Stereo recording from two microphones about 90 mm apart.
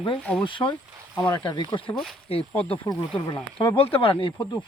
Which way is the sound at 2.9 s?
25° left (ahead or behind).